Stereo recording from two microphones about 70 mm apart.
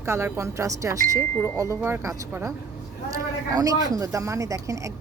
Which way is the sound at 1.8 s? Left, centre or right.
Right.